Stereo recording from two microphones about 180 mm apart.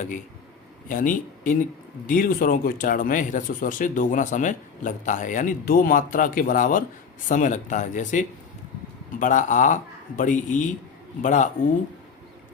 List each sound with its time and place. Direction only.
0.9 s speech: 50° left (ahead or behind)